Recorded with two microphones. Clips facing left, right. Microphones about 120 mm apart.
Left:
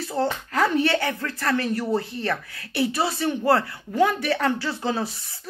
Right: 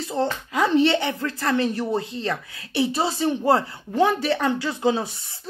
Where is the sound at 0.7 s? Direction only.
20° right (ahead or behind).